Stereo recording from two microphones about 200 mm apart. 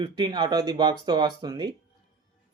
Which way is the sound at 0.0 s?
20° right (ahead or behind).